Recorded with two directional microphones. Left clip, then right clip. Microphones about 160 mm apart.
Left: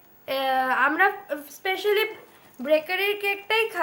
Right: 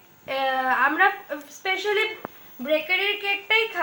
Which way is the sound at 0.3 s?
30° left (ahead or behind).